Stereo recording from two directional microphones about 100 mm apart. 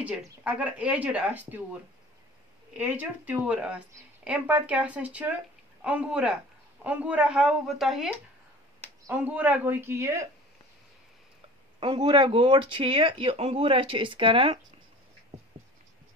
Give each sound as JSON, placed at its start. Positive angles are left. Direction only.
{"t": 0.0, "sound": "speech", "side_deg": -15}
{"t": 2.8, "sound": "speech", "side_deg": -15}
{"t": 9.1, "sound": "speech", "side_deg": -20}
{"t": 11.8, "sound": "speech", "side_deg": -50}